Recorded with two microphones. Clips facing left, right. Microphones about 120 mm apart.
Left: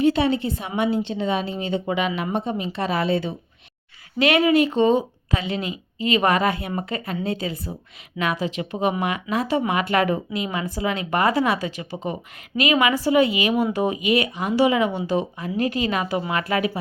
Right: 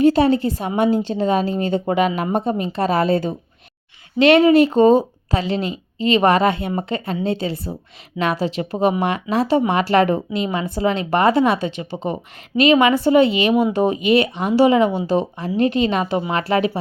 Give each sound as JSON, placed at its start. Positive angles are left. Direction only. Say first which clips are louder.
{"t": 0.0, "sound": "a woman's voice", "louder": "right 5 dB", "side_deg": -40}
{"t": 4.2, "sound": "a woman's voice", "louder": "right 6 dB", "side_deg": -25}